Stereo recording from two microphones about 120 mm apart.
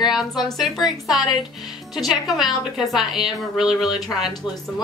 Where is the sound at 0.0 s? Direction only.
5° right (ahead or behind).